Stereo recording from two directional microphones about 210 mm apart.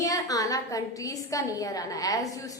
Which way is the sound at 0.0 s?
15° left (ahead or behind).